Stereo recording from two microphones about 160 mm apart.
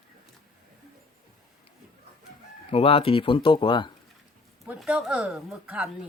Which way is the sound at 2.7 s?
35° left (ahead or behind).